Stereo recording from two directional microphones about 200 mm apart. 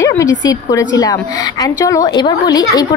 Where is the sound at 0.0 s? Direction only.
15° left (ahead or behind).